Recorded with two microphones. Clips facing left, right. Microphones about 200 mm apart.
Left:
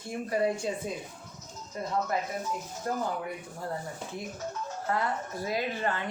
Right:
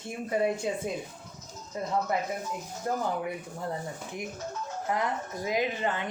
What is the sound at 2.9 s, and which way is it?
A woman's voice, 25° right (ahead or behind).